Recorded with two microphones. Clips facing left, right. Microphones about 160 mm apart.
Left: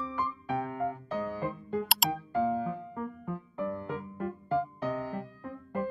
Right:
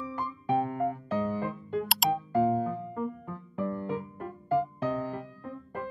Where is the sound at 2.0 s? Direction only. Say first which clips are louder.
Right 8 dB; centre (ahead or behind).